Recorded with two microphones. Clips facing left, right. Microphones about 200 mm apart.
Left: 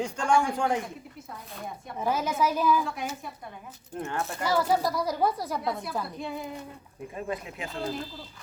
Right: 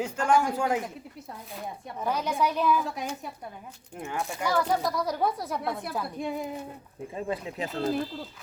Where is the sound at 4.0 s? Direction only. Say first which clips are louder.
Left 1 dB; 15° right (ahead or behind).